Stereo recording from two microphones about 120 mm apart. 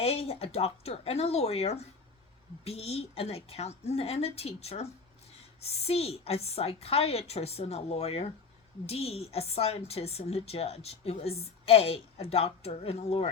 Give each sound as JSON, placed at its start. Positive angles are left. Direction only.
{"t": 0.0, "sound": "a woman's voice", "side_deg": 55}